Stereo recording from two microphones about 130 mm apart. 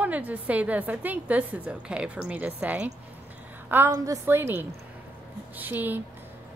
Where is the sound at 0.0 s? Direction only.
10° right (ahead or behind).